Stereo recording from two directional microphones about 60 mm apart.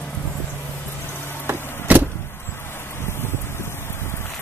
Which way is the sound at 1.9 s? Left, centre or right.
Right.